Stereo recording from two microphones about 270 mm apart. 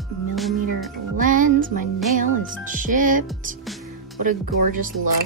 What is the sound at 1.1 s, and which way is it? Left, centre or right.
Speech, right.